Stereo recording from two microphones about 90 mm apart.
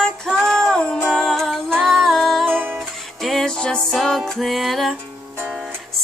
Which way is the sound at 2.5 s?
20° right (ahead or behind).